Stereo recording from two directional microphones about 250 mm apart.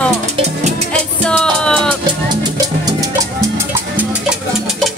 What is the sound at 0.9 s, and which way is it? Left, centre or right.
Music, centre.